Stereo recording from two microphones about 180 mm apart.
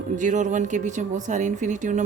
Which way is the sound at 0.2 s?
45° right (ahead or behind).